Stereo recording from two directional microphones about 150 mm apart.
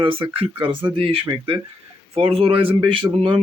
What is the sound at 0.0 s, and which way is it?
Speech, 35° right (ahead or behind).